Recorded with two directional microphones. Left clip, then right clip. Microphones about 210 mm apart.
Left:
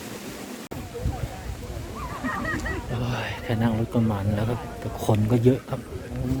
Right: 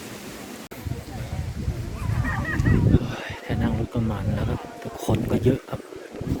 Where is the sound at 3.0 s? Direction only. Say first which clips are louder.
Left 2 dB; 25° left (ahead or behind).